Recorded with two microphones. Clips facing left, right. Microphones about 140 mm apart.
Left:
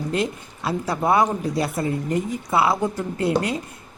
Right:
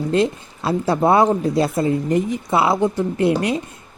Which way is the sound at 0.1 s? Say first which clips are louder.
Right 7 dB; 30° right (ahead or behind).